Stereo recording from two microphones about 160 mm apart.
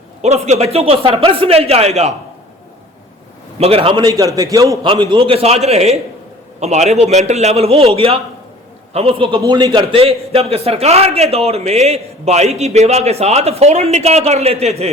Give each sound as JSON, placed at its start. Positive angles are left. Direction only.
{"t": 0.2, "sound": "a man's voice", "side_deg": -45}
{"t": 3.6, "sound": "a man's voice", "side_deg": -35}
{"t": 4.0, "sound": "a man's voice", "side_deg": -20}